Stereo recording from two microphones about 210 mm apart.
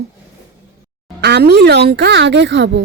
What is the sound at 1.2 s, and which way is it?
Speech, 50° right (ahead or behind).